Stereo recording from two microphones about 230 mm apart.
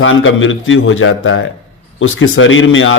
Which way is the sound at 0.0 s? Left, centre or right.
Left.